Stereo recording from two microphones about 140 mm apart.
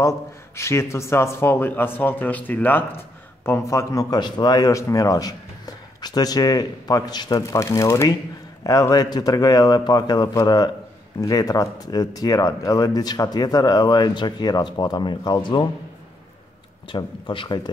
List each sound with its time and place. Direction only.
0.6 s speech: 20° left (ahead or behind)
16.9 s speech: 35° left (ahead or behind)